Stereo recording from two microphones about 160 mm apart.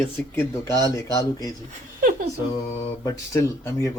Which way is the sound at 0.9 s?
20° left (ahead or behind).